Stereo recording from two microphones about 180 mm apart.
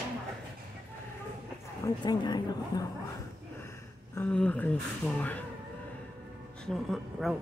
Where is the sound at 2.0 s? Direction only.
25° left (ahead or behind).